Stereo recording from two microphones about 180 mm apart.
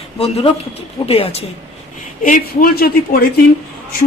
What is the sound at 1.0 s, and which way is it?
Speech, 30° left (ahead or behind).